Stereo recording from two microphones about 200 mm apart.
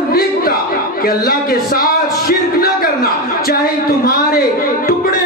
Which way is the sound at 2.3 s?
50° left (ahead or behind).